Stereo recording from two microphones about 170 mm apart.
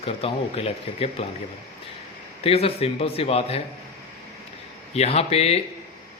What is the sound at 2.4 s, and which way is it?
Speech, 35° left (ahead or behind).